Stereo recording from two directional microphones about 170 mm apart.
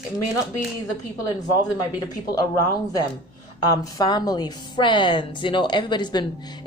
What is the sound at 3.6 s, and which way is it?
A woman's voice, 25° left (ahead or behind).